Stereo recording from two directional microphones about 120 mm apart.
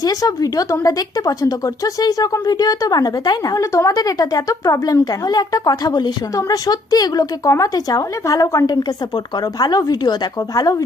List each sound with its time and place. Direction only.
0.0 s speech: 30° left (ahead or behind)